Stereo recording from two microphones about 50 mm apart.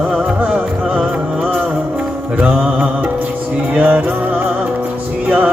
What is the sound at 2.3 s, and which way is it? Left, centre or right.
Music, right.